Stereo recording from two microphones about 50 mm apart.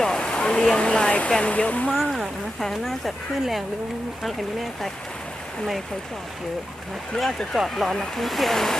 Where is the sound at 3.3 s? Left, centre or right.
Centre.